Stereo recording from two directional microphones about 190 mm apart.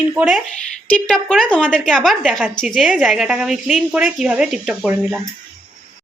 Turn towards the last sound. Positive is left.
turn(degrees=0)  # may be behind; listen again after turning